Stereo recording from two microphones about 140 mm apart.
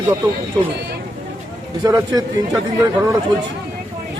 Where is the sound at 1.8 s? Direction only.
25° right (ahead or behind).